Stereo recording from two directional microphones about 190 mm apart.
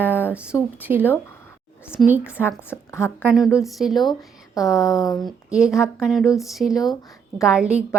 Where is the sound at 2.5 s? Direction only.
10° left (ahead or behind).